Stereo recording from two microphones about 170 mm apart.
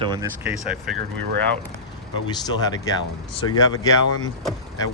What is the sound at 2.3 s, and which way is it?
Speech, 25° left (ahead or behind).